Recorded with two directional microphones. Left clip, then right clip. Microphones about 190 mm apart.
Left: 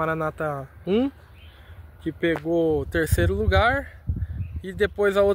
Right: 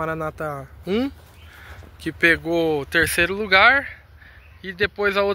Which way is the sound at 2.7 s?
30° left (ahead or behind).